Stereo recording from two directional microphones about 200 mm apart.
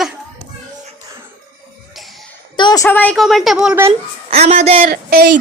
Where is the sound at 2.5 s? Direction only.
20° left (ahead or behind); by 3.9 s 10° right (ahead or behind).